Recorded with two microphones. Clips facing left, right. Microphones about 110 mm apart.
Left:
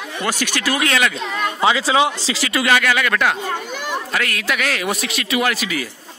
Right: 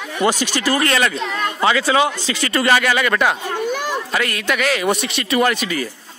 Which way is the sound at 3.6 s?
50° right (ahead or behind).